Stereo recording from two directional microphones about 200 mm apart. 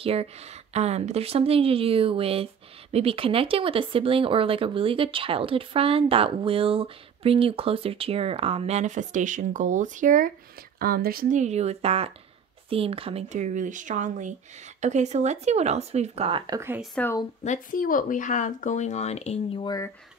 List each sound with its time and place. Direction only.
0.0 s a woman's voice: 30° right (ahead or behind); by 16.8 s 15° right (ahead or behind)
16.9 s speech: 10° left (ahead or behind)
17.4 s speech: 40° left (ahead or behind); by 19.9 s 20° left (ahead or behind)